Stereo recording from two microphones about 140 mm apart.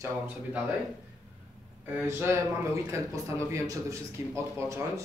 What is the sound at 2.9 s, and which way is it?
A man's voice, 20° right (ahead or behind).